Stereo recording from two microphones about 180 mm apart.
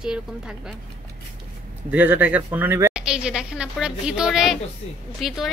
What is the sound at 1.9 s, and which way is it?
A woman's voice, 10° right (ahead or behind).